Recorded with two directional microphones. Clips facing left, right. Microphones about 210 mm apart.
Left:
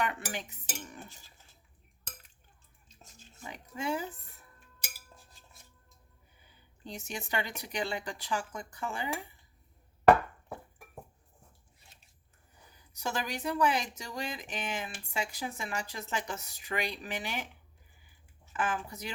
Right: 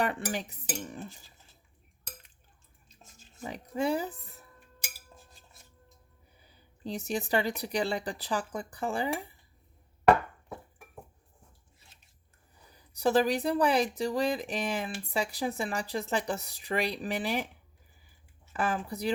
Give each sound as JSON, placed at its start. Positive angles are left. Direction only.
{"t": 0.0, "sound": "speech", "side_deg": -35}
{"t": 3.4, "sound": "speech", "side_deg": -35}
{"t": 6.4, "sound": "speech", "side_deg": -35}
{"t": 12.7, "sound": "speech", "side_deg": -35}
{"t": 18.5, "sound": "speech", "side_deg": -35}